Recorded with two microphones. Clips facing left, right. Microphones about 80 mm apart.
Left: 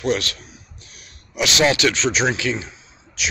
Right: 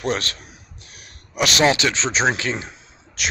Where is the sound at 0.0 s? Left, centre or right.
Right.